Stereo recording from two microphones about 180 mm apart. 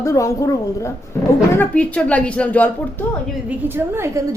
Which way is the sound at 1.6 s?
5° left (ahead or behind).